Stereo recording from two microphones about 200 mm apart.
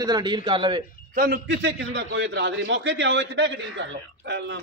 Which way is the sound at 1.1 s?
50° right (ahead or behind).